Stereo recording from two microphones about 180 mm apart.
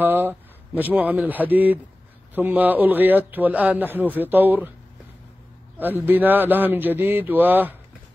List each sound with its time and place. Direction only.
0.0 s a man's voice: 10° right (ahead or behind)
5.8 s a man's voice: 10° right (ahead or behind)